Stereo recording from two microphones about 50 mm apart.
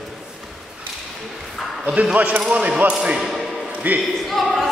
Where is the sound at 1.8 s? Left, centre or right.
Right.